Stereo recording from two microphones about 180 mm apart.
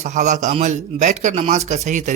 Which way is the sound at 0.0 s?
40° right (ahead or behind).